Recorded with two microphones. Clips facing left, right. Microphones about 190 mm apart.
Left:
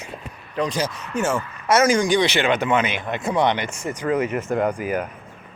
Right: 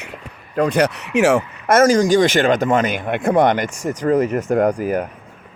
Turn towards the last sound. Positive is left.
turn(degrees=-35)  # may be behind; listen again after turning